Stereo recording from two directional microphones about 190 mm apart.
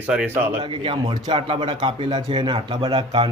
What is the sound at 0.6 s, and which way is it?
A man's voice, 25° right (ahead or behind).